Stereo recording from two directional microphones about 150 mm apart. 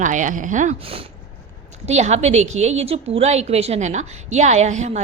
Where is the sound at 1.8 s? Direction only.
50° right (ahead or behind).